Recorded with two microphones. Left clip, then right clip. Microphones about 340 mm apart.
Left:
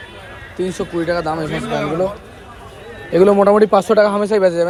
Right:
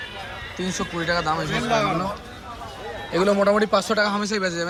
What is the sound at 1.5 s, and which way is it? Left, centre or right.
Speech, centre.